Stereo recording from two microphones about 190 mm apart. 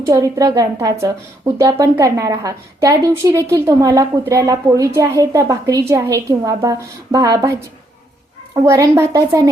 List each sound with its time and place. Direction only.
0.0 s speech: 15° right (ahead or behind)
8.5 s speech: 15° right (ahead or behind)